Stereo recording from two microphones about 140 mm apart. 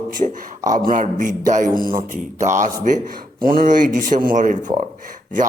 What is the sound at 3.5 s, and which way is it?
Speech, 80° right.